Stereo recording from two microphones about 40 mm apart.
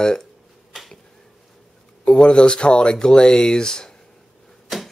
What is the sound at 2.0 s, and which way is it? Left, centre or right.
Speech, left.